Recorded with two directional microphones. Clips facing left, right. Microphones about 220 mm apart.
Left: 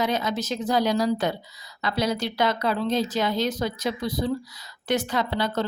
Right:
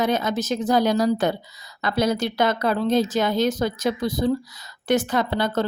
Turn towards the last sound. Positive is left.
turn(degrees=-50)  # may be behind; listen again after turning